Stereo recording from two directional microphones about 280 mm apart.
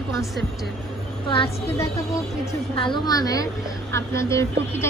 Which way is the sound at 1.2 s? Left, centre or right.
Centre.